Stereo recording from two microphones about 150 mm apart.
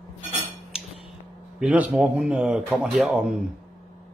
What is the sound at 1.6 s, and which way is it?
Speech, 10° right (ahead or behind).